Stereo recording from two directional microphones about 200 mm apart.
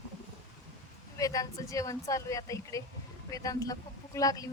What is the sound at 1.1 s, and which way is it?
A woman's voice, 15° left (ahead or behind).